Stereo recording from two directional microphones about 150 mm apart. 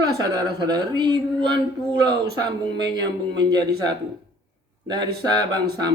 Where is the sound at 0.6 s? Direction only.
30° right (ahead or behind).